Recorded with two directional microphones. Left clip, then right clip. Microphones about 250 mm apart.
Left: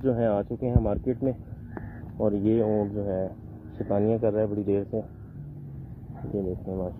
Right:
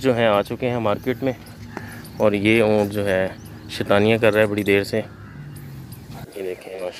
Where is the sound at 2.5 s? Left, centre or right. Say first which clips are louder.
Right 8 dB; right.